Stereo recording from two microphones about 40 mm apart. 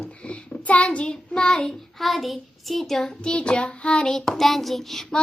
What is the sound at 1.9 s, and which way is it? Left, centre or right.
Child singing, centre.